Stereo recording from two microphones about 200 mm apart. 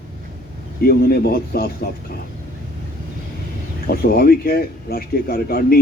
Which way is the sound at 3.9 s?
50° left (ahead or behind).